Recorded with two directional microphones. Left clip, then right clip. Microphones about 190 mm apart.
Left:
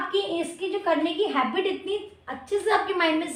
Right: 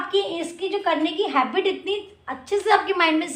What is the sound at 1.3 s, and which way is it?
A woman's voice, 20° right (ahead or behind).